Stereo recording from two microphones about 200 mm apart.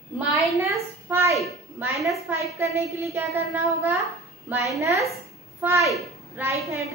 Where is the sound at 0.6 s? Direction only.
15° right (ahead or behind).